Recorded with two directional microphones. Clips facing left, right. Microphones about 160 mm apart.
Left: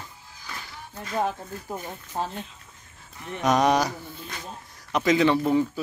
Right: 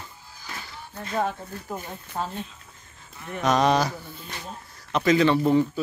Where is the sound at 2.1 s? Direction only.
30° left (ahead or behind).